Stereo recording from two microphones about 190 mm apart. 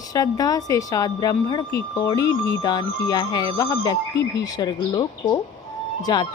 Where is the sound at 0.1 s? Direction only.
20° left (ahead or behind).